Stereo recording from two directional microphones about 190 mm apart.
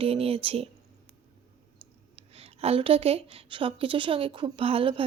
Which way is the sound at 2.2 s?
30° right (ahead or behind).